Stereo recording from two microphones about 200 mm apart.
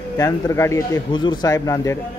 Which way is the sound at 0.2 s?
15° left (ahead or behind).